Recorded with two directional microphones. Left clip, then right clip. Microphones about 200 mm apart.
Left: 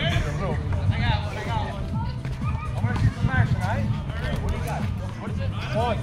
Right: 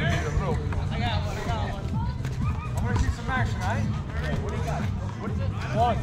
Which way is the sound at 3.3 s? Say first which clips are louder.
Even; 50° right (ahead or behind).